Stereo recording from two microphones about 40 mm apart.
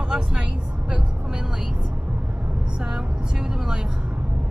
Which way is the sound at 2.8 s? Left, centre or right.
Centre.